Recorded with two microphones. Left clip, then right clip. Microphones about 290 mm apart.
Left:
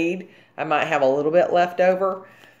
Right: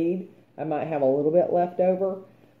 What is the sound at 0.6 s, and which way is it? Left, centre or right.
Speech, left.